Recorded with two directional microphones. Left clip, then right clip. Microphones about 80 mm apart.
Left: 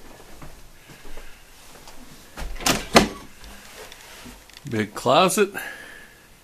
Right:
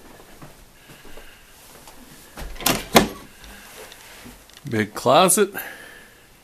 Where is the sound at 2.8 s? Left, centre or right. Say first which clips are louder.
Even; centre.